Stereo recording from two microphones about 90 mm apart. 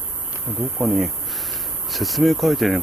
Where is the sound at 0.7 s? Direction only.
5° right (ahead or behind).